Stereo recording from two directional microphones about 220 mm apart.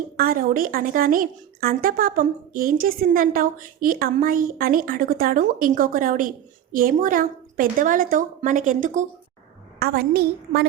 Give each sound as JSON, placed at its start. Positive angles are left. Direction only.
{"t": 0.2, "sound": "a woman's voice", "side_deg": -40}